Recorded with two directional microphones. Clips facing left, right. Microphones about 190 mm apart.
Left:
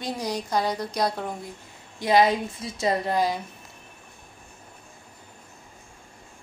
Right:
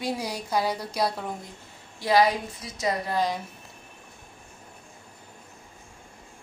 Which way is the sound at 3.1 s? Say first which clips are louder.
Left 2 dB; 5° left (ahead or behind).